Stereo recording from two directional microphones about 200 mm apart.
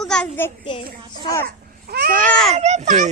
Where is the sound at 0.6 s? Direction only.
25° left (ahead or behind).